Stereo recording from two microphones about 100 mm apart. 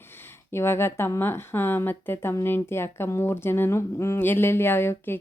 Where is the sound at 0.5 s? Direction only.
25° left (ahead or behind).